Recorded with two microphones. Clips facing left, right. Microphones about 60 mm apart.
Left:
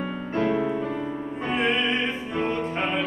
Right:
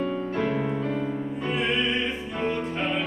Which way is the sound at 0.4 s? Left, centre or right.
Centre.